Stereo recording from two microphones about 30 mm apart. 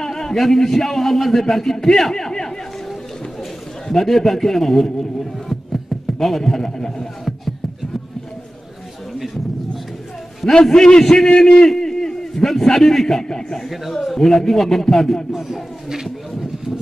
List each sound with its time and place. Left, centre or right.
0.0 s a man's voice: centre
3.9 s a man's voice: centre
10.4 s a man's voice: left
11.3 s a man's voice: left
11.8 s a sound: left
12.9 s a man's voice: centre
15.3 s speech: centre